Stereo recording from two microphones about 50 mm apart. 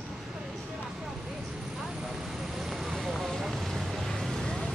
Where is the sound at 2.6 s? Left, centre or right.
Centre.